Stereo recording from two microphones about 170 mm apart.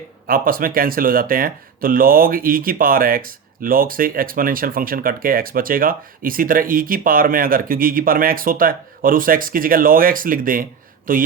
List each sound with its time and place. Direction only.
0.3 s speech: 55° right (ahead or behind)